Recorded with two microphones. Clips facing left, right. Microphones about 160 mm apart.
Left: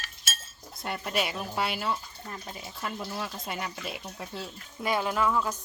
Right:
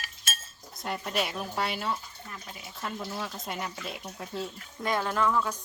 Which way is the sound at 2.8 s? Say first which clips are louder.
Even; centre (ahead or behind).